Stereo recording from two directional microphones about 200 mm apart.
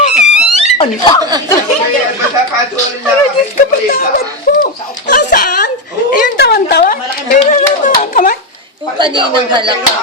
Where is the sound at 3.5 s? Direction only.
45° left (ahead or behind).